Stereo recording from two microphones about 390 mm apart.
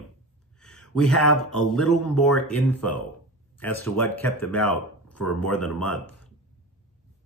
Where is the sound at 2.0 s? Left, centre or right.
Left.